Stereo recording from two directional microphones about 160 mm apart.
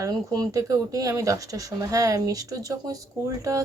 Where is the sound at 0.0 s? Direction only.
20° right (ahead or behind).